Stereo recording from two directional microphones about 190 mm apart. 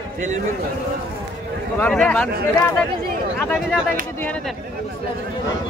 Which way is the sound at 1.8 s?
5° left (ahead or behind).